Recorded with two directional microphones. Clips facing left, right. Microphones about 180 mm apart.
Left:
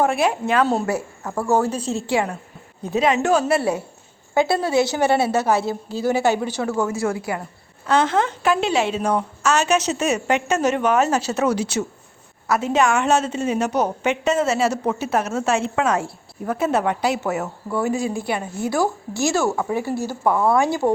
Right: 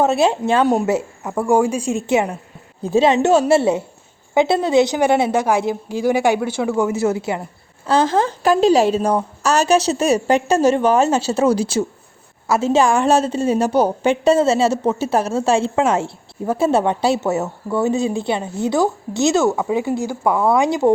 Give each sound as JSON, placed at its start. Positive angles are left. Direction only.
{"t": 0.0, "sound": "a woman's voice", "side_deg": -25}
{"t": 0.6, "sound": "a woman's voice", "side_deg": -15}